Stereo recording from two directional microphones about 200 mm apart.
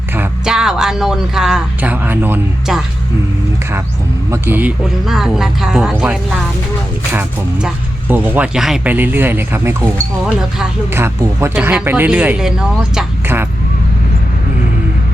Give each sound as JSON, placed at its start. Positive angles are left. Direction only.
{"t": 0.2, "sound": "speech", "side_deg": -5}
{"t": 4.3, "sound": "speech", "side_deg": -10}
{"t": 10.9, "sound": "speech", "side_deg": -10}